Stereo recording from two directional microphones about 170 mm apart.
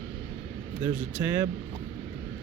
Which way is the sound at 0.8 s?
10° right (ahead or behind).